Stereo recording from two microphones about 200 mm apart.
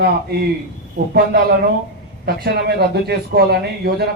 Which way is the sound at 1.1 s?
50° right (ahead or behind).